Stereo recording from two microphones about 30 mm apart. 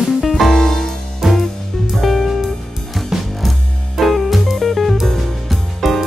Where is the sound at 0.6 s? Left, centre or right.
Centre.